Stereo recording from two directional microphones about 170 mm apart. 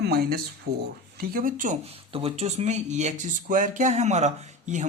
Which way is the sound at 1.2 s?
55° right (ahead or behind).